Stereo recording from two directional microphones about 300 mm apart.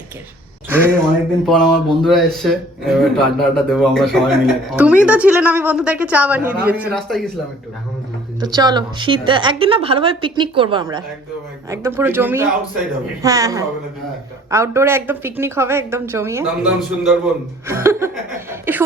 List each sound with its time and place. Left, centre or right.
1.5 s speech: centre
8.4 s a woman's voice: centre